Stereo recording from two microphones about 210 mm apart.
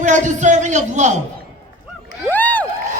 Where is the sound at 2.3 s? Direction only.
5° left (ahead or behind).